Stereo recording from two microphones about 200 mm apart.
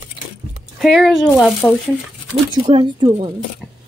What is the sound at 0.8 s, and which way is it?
Speech, centre (ahead or behind).